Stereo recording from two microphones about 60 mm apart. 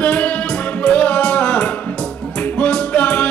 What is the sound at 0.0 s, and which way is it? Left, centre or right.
Music, left.